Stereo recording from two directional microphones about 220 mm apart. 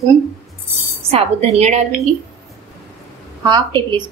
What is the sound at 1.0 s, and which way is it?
Speech, 30° right (ahead or behind).